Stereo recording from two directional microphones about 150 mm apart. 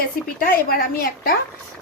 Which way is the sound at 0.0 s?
75° left (ahead or behind).